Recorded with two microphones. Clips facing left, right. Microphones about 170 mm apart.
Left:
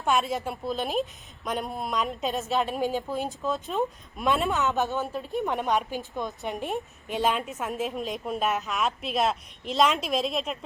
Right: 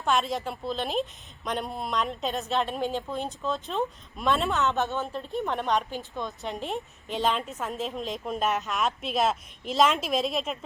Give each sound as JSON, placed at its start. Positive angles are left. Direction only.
{"t": 0.0, "sound": "a woman's voice", "side_deg": 5}
{"t": 6.7, "sound": "a woman's voice", "side_deg": 5}